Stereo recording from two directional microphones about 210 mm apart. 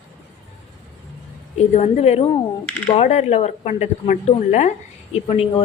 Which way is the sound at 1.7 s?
35° left (ahead or behind).